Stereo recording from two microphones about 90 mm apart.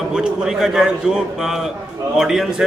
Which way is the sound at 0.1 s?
5° right (ahead or behind).